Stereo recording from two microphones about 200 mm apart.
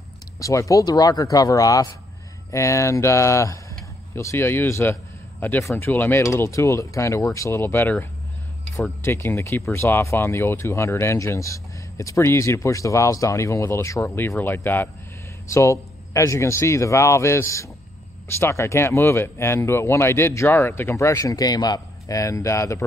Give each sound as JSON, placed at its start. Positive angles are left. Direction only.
{"t": 0.4, "sound": "speech", "side_deg": 15}